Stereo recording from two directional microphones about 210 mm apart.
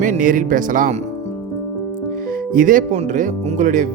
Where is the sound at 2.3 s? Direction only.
40° right (ahead or behind).